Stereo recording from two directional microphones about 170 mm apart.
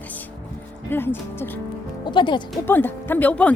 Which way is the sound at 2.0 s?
30° left (ahead or behind).